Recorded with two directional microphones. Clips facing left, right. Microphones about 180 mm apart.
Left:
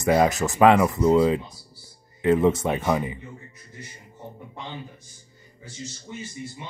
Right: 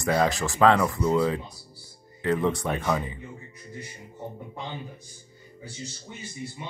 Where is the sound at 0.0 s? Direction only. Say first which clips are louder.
Left 4 dB; 15° left (ahead or behind).